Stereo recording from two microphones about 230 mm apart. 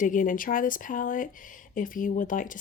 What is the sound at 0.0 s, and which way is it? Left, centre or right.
Speech, left.